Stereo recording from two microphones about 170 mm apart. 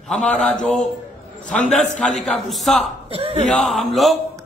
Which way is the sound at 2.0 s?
5° left (ahead or behind).